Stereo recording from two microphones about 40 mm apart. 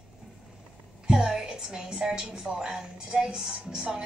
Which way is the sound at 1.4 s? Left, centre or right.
Centre.